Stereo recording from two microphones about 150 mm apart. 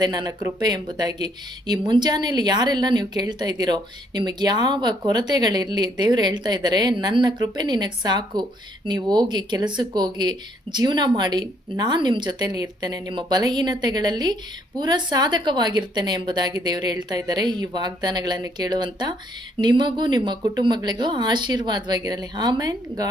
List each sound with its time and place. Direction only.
0.0 s speech: 25° right (ahead or behind)